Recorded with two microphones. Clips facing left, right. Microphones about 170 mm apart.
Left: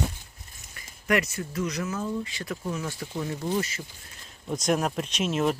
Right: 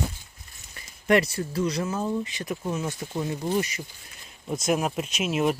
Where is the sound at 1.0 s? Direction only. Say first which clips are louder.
Right 4 dB; 30° right (ahead or behind).